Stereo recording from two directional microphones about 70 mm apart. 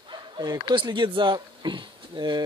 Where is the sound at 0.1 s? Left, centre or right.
Right.